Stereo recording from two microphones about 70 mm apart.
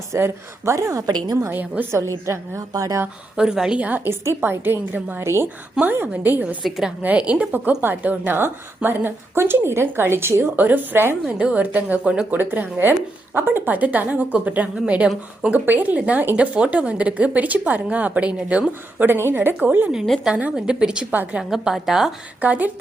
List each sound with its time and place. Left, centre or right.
0.1 s a woman's voice: right
1.0 s a woman's voice: right
1.5 s speech: right
2.2 s a woman's voice: right
3.3 s a woman's voice: centre
3.8 s a woman's voice: right
5.2 s a woman's voice: right
5.9 s speech: right
6.6 s a woman's voice: centre
7.0 s a woman's voice: centre
11.3 s a woman's voice: centre
18.9 s speech: right
20.2 s a woman's voice: centre
22.4 s speech: right